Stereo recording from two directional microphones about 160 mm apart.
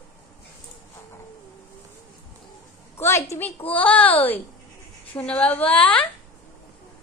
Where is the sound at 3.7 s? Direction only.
10° left (ahead or behind).